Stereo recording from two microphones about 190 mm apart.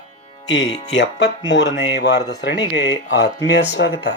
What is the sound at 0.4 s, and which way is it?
Speech, 70° left (ahead or behind).